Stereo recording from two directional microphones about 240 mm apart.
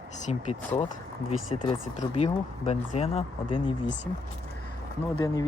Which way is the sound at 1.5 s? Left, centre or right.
Left.